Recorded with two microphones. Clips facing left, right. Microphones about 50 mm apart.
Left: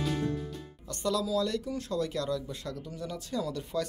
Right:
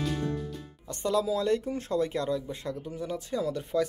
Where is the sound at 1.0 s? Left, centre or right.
Right.